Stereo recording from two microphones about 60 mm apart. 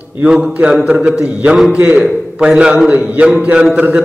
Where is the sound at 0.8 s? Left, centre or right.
Centre.